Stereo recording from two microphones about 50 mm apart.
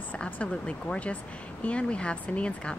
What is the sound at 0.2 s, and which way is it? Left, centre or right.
Speech, left.